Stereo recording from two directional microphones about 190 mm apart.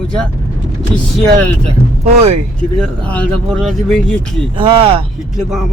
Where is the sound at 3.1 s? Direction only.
5° left (ahead or behind).